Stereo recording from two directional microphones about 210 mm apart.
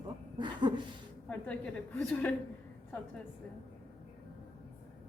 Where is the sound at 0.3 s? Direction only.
20° right (ahead or behind).